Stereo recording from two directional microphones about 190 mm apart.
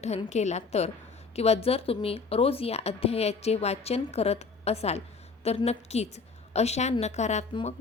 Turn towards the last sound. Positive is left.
turn(degrees=35)  # may be behind; listen again after turning